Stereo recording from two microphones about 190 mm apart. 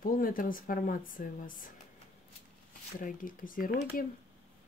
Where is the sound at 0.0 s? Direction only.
50° left (ahead or behind).